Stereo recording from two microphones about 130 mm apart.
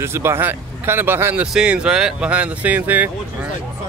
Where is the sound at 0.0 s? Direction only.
20° right (ahead or behind).